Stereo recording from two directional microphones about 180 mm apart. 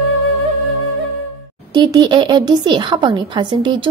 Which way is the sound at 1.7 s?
25° right (ahead or behind).